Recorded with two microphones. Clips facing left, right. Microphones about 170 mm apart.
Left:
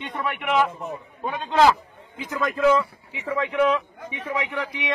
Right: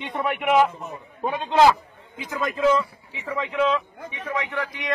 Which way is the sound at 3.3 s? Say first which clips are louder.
Left 2 dB; 10° left (ahead or behind).